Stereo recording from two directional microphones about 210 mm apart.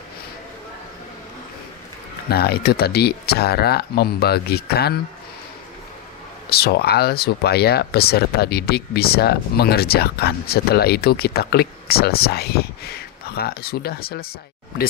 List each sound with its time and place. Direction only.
2.3 s speech: 50° left (ahead or behind)
6.5 s speech: 50° left (ahead or behind)